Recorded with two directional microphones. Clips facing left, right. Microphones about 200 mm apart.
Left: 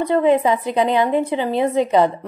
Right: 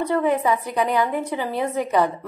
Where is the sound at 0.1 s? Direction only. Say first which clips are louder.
Left 6 dB; 25° left (ahead or behind).